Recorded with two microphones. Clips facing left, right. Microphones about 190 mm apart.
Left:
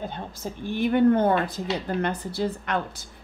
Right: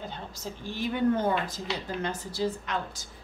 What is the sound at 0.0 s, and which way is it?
A woman's voice, 55° left (ahead or behind).